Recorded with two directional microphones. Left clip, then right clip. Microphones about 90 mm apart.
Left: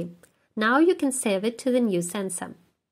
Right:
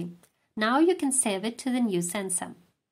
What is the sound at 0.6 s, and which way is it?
A woman's voice, 40° left (ahead or behind).